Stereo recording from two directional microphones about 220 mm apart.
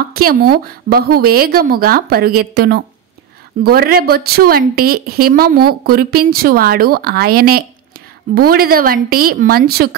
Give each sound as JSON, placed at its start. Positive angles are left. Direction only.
{"t": 0.1, "sound": "speech", "side_deg": -45}